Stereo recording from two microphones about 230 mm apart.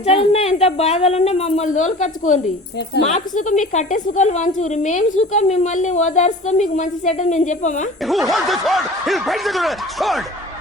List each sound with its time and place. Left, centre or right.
0.0 s a woman's voice: left
8.0 s speech: centre